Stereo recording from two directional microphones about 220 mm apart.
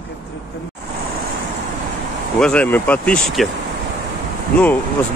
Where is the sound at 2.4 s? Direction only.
5° left (ahead or behind).